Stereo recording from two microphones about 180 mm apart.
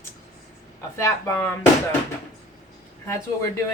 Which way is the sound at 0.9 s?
15° left (ahead or behind).